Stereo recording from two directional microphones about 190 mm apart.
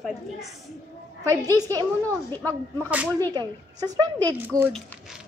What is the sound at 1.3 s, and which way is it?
Speech, 20° right (ahead or behind).